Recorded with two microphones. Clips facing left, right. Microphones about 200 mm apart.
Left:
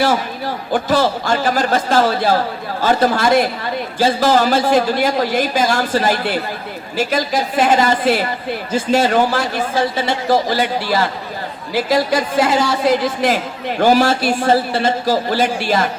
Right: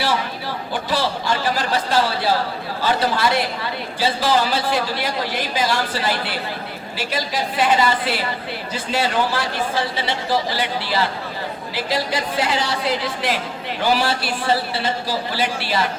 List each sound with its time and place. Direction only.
0.0 s a woman's voice: 45° left (ahead or behind)